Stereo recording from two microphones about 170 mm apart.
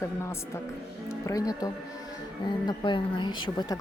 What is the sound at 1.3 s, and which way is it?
Speech, 20° left (ahead or behind).